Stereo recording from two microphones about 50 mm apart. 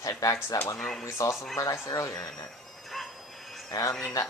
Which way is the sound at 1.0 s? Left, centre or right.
Left.